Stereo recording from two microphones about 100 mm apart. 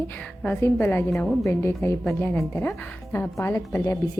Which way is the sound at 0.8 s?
15° left (ahead or behind).